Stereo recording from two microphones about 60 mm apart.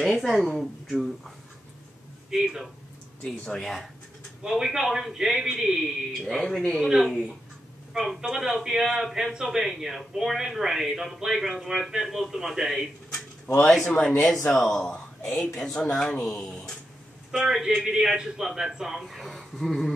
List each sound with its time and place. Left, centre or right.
0.0 s a man's voice: centre
2.3 s a man's voice: centre
3.2 s speech: centre
4.4 s a man's voice: centre
6.2 s speech: centre
7.9 s a man's voice: centre
13.7 s a man's voice: centre
17.3 s a man's voice: centre